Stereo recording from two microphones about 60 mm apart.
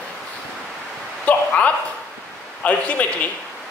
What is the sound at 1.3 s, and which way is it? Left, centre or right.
A man's voice, left.